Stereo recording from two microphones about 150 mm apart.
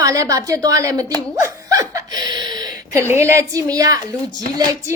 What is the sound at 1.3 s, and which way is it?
Chuckle, 20° right (ahead or behind).